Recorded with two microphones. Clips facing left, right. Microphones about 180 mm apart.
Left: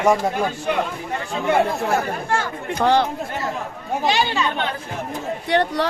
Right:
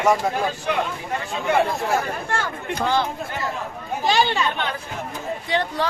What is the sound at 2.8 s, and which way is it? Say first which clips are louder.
Speech: left 5 dB; 70° left (ahead or behind).